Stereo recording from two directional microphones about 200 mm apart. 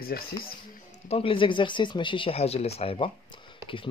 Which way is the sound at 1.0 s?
30° left (ahead or behind).